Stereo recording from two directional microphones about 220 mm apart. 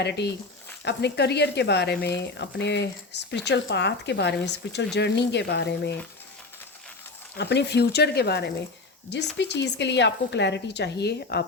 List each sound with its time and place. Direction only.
0.0 s speech: 50° left (ahead or behind)
7.3 s speech: 50° left (ahead or behind)